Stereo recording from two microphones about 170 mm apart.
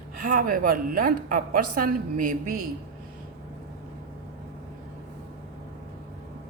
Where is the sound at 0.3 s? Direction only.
55° right (ahead or behind).